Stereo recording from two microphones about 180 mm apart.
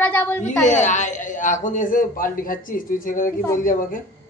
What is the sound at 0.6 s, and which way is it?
A man's voice, 40° left (ahead or behind).